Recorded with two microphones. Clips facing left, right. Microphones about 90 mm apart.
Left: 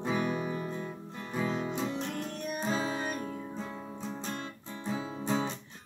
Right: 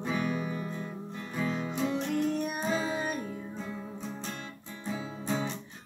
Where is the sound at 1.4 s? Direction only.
5° left (ahead or behind).